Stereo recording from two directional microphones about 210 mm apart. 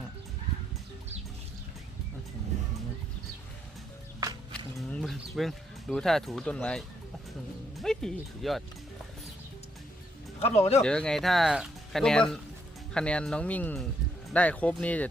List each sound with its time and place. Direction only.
4.9 s speech: centre (ahead or behind)
10.4 s speech: 30° left (ahead or behind)
10.8 s speech: 5° left (ahead or behind)